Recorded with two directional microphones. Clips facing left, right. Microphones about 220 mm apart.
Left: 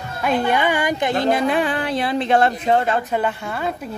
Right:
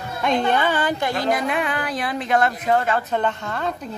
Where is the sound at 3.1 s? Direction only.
10° left (ahead or behind).